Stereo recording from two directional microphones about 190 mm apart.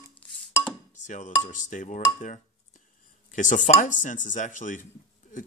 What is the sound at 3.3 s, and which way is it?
Speech, 40° left (ahead or behind).